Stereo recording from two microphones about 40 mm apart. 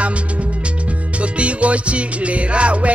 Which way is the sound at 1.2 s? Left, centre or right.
Right.